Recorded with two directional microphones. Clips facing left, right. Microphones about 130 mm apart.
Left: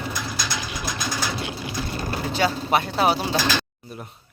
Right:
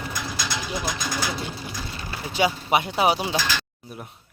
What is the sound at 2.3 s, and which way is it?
Speech, 15° right (ahead or behind).